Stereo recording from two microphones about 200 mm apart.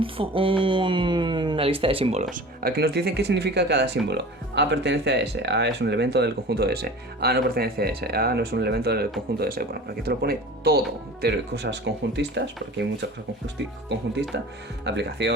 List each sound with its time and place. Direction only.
0.0 s speech: 25° right (ahead or behind)
2.3 s speech: 50° right (ahead or behind)
14.3 s speech: 60° right (ahead or behind)